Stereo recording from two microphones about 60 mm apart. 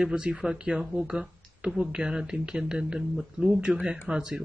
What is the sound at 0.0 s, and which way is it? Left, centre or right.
Speech, centre.